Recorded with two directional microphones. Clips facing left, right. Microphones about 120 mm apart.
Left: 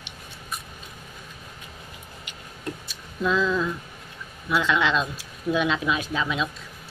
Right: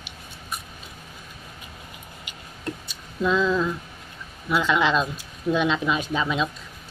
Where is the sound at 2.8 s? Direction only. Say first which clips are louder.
Right 1 dB; centre (ahead or behind).